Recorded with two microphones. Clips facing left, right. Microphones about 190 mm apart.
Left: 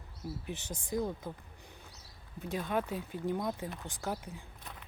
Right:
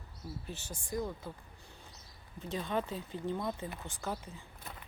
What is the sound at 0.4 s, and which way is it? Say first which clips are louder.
Speech: left 4 dB; 20° left (ahead or behind).